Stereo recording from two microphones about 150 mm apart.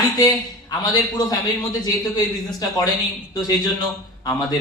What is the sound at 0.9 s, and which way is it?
A man's voice, 25° left (ahead or behind).